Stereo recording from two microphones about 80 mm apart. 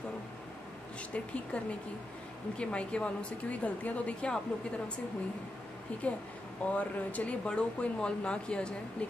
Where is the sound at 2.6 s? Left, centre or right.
Centre.